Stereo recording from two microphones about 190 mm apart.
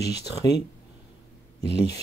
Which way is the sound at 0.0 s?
60° left (ahead or behind).